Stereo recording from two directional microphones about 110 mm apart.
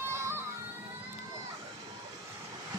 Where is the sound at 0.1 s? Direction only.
25° right (ahead or behind).